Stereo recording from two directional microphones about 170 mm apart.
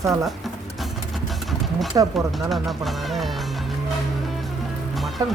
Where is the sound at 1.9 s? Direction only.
20° right (ahead or behind).